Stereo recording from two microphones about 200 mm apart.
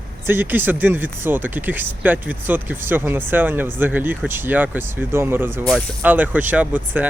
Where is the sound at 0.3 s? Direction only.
10° right (ahead or behind).